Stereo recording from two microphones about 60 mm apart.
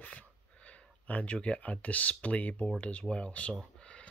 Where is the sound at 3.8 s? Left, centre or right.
Centre.